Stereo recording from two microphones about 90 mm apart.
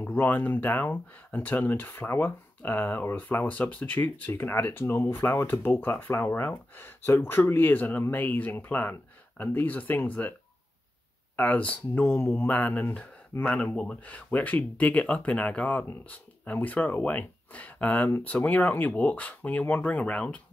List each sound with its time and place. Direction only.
0.0 s speech: 20° left (ahead or behind)
11.3 s speech: 20° left (ahead or behind)